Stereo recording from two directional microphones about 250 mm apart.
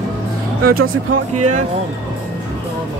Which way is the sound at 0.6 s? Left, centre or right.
Right.